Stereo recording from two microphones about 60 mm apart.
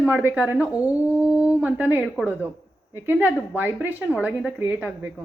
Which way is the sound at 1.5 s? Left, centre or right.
Right.